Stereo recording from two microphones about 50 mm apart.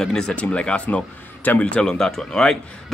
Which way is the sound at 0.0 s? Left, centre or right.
Centre.